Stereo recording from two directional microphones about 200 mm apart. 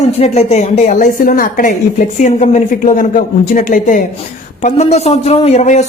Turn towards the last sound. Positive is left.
turn(degrees=35)  # may be behind; listen again after turning